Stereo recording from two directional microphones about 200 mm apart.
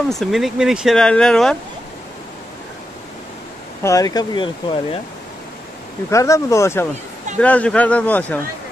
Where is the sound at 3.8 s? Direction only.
15° left (ahead or behind).